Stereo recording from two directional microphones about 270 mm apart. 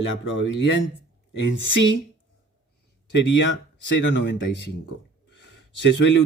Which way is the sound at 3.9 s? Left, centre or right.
Left.